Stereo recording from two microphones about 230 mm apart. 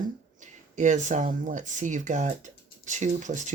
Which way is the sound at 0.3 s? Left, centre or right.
Right.